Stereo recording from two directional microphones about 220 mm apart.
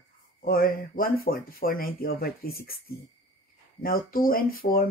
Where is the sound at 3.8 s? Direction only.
40° left (ahead or behind).